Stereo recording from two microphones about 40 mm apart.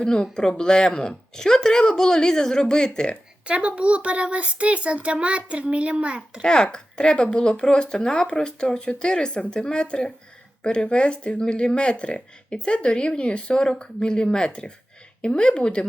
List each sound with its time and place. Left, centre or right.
0.0 s a woman's voice: left
3.4 s a child's voice: right
6.4 s speech: left